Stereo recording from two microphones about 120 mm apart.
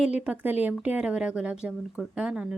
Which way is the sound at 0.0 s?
10° right (ahead or behind).